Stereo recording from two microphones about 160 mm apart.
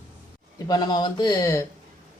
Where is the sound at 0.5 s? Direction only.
25° left (ahead or behind).